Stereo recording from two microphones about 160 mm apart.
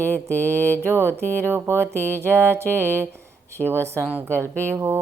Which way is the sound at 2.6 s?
10° left (ahead or behind).